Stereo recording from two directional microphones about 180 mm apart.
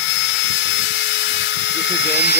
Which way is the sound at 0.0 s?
90° left.